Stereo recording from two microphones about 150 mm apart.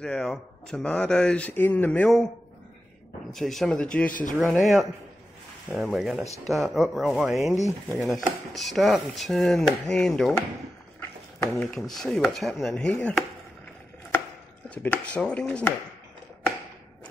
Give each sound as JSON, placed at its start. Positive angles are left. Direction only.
{"t": 0.0, "sound": "speech", "side_deg": 5}
{"t": 3.3, "sound": "speech", "side_deg": 0}
{"t": 4.1, "sound": "speech", "side_deg": 65}
{"t": 4.5, "sound": "speech", "side_deg": 0}
{"t": 5.9, "sound": "speech", "side_deg": 0}
{"t": 11.0, "sound": "a sound", "side_deg": 15}
{"t": 11.5, "sound": "speech", "side_deg": 5}
{"t": 14.7, "sound": "speech", "side_deg": 10}